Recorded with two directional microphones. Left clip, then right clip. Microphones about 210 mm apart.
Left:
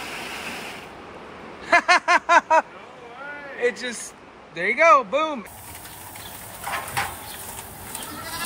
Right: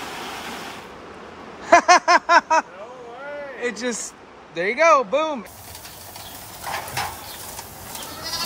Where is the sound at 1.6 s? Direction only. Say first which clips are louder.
Right 4 dB; 30° right (ahead or behind).